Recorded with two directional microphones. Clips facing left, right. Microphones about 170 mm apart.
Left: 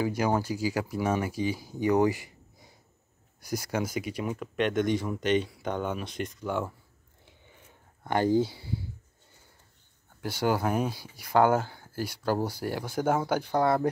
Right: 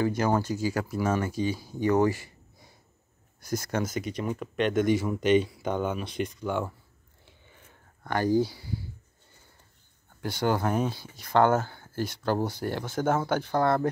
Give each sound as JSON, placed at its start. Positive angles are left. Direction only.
{"t": 0.0, "sound": "speech", "side_deg": 10}
{"t": 8.0, "sound": "speech", "side_deg": 20}
{"t": 10.2, "sound": "speech", "side_deg": 5}